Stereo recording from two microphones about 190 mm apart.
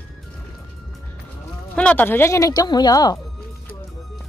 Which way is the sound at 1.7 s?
10° left (ahead or behind).